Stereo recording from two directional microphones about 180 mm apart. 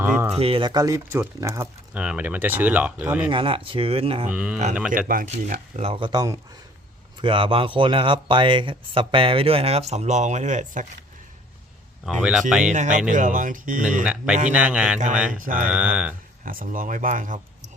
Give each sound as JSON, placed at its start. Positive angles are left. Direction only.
{"t": 0.0, "sound": "speech", "side_deg": -10}
{"t": 0.3, "sound": "speech", "side_deg": -30}
{"t": 3.2, "sound": "speech", "side_deg": -30}
{"t": 4.3, "sound": "speech", "side_deg": -5}
{"t": 5.0, "sound": "speech", "side_deg": -50}
{"t": 12.2, "sound": "speech", "side_deg": -5}
{"t": 12.7, "sound": "speech", "side_deg": -45}
{"t": 14.0, "sound": "speech", "side_deg": -5}
{"t": 15.3, "sound": "speech", "side_deg": -45}
{"t": 15.7, "sound": "speech", "side_deg": -5}
{"t": 16.4, "sound": "speech", "side_deg": -50}